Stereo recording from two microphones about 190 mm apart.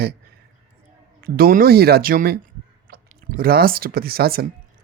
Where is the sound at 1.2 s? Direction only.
50° right (ahead or behind).